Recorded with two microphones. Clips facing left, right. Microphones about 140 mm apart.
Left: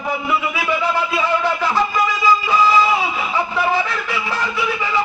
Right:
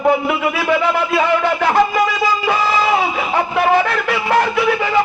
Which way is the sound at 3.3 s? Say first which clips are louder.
Right 5 dB; 60° right (ahead or behind).